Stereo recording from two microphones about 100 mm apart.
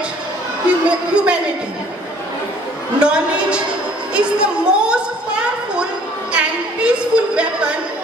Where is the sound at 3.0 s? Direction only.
10° right (ahead or behind).